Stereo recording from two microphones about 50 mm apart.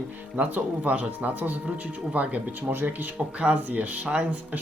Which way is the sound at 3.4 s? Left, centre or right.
Right.